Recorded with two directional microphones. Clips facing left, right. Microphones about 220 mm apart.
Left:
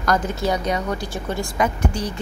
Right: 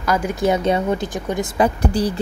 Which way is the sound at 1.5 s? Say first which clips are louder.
Right 5 dB; 35° right (ahead or behind).